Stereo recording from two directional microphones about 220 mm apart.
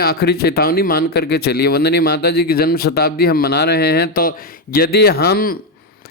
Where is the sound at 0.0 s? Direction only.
45° left (ahead or behind).